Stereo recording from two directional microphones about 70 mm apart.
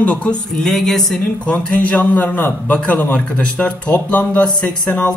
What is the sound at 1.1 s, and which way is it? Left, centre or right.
A man's voice, centre.